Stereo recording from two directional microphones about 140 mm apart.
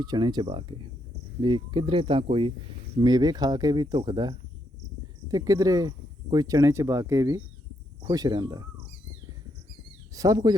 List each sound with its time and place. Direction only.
0.0 s speech: 30° right (ahead or behind)
3.0 s speech: 30° right (ahead or behind)
10.2 s speech: 25° right (ahead or behind)